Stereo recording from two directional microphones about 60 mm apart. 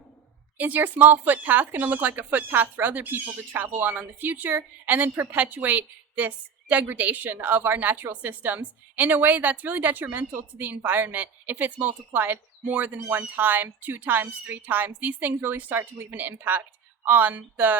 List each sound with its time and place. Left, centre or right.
0.5 s speech: right